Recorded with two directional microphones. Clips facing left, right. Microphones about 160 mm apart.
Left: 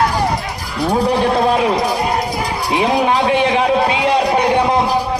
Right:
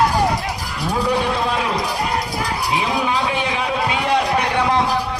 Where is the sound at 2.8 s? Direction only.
40° left (ahead or behind).